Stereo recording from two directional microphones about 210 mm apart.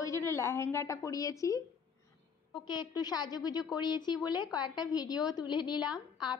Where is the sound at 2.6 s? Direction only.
20° left (ahead or behind).